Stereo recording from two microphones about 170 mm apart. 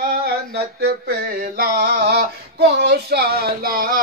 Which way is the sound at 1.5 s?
75° right (ahead or behind).